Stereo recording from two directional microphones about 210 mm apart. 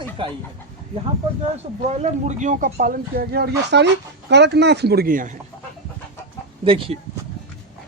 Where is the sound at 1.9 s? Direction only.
35° right (ahead or behind).